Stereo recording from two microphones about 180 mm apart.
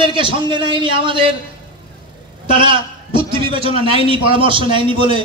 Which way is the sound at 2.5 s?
30° right (ahead or behind).